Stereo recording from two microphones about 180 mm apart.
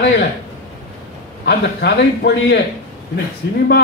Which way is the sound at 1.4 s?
70° left (ahead or behind).